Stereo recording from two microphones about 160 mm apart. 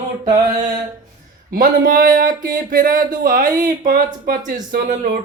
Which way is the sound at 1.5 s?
60° right (ahead or behind).